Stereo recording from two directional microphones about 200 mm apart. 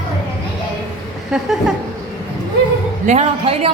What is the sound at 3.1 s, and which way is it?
Speech, 30° right (ahead or behind).